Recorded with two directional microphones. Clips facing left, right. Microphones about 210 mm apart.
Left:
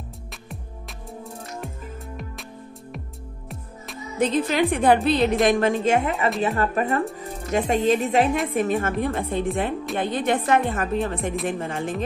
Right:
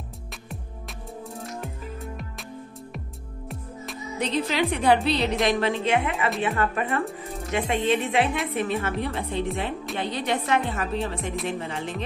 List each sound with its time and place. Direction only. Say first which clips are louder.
1.2 s music: even; centre (ahead or behind)
3.4 s music: right 4 dB; centre (ahead or behind)
4.5 s speech: left 1 dB; 50° left (ahead or behind)
7.2 s music: left 1 dB; centre (ahead or behind)
7.5 s speech: left 4 dB; 40° left (ahead or behind)